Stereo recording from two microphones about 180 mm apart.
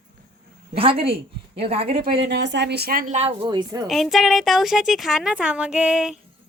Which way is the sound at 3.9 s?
Centre (ahead or behind).